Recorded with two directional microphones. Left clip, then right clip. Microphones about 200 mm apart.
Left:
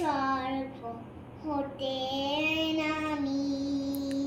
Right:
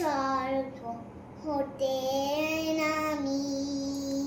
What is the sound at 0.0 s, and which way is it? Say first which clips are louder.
Child singing: right 1 dB; 20° right (ahead or behind).